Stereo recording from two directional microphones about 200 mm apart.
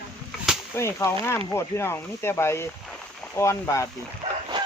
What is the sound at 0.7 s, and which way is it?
Speech, 15° left (ahead or behind).